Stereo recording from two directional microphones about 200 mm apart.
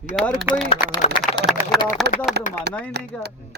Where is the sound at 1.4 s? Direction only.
55° right (ahead or behind).